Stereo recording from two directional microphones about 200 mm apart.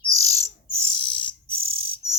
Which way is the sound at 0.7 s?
25° left (ahead or behind).